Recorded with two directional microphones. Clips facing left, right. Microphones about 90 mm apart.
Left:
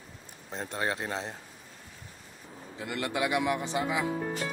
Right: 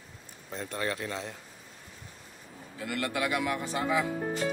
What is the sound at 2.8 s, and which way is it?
Speech, 20° left (ahead or behind).